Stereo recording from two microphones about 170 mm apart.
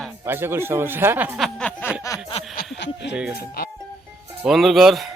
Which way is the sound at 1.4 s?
5° left (ahead or behind).